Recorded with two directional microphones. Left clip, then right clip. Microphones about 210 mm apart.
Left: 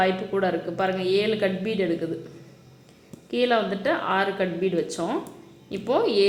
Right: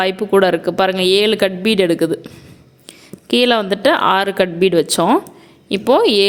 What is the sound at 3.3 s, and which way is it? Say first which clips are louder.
A woman's voice: right 9 dB; 50° right (ahead or behind).